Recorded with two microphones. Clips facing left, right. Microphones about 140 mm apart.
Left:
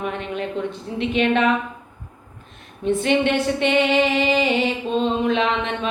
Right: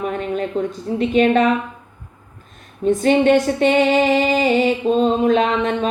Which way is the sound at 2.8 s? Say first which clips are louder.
Right 5 dB; 40° right (ahead or behind).